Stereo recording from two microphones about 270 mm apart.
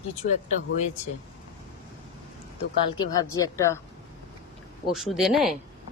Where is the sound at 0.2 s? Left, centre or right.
Left.